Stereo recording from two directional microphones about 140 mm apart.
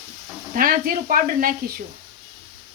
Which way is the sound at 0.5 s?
90° right.